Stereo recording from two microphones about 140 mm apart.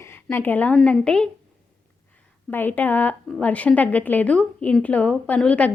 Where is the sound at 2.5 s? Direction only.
15° left (ahead or behind).